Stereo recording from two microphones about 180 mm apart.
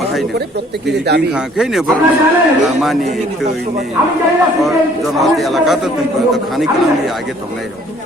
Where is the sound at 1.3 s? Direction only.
5° right (ahead or behind).